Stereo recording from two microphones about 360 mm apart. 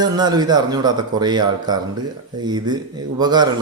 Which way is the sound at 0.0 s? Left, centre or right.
Centre.